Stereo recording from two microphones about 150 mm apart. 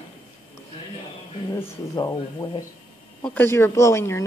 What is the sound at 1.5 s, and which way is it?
Speech, 20° left (ahead or behind).